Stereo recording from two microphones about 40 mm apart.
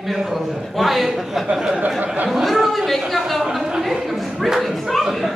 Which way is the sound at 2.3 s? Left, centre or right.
Centre.